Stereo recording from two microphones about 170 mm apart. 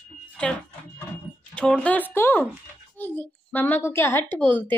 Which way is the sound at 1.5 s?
5° left (ahead or behind).